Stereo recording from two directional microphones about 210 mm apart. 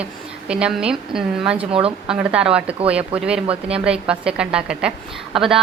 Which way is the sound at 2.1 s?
5° right (ahead or behind).